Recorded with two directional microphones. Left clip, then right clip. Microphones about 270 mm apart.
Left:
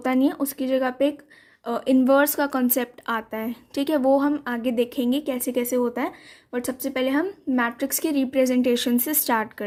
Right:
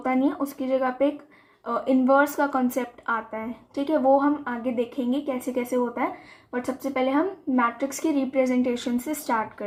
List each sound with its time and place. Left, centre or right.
0.0 s speech: left